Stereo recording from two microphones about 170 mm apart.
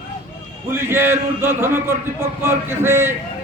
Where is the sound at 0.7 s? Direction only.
15° right (ahead or behind).